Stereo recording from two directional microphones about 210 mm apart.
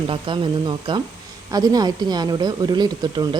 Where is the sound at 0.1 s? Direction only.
25° right (ahead or behind).